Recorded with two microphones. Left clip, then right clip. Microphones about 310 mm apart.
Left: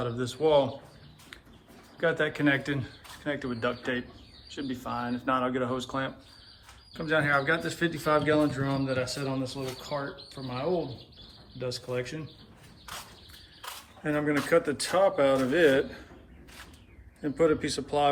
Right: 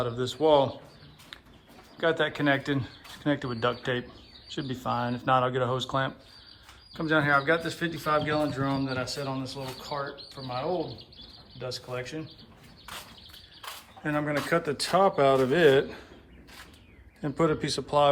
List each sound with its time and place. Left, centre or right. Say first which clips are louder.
0.0 s speech: right 2 dB; centre
2.0 s speech: right 1 dB; centre
14.0 s speech: left 1 dB; centre
17.2 s speech: left 1 dB; centre